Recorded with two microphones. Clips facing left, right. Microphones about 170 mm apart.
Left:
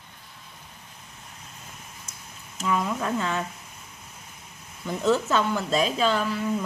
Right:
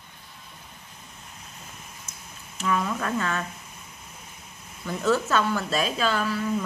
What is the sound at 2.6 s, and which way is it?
Speech, 15° left (ahead or behind).